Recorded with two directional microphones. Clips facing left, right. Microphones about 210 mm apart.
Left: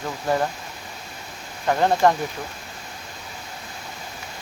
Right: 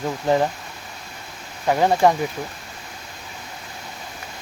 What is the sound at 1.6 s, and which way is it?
Speech, 10° right (ahead or behind).